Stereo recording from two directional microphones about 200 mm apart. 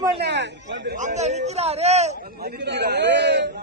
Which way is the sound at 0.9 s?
35° right (ahead or behind).